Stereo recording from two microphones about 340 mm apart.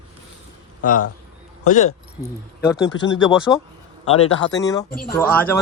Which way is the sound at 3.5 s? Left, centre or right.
Centre.